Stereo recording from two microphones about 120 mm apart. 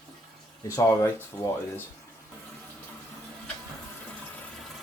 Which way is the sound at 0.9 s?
25° left (ahead or behind).